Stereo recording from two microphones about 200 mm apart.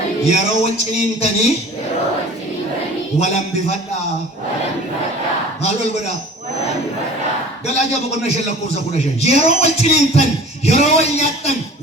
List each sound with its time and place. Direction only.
0.3 s a man's voice: 35° left (ahead or behind)
3.2 s a man's voice: 35° left (ahead or behind)
7.7 s a man's voice: 35° left (ahead or behind)